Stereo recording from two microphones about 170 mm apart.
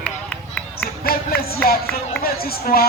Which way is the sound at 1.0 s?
65° left (ahead or behind).